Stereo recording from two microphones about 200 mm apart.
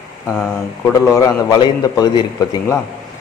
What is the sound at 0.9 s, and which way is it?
A man's voice, 15° left (ahead or behind).